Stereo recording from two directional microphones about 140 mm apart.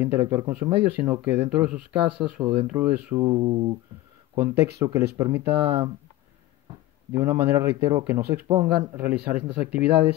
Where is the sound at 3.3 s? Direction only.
40° right (ahead or behind).